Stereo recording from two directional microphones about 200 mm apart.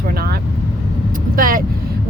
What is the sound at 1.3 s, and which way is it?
Speech, 45° right (ahead or behind).